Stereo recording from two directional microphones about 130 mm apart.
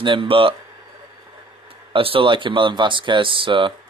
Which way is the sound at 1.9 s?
45° right (ahead or behind).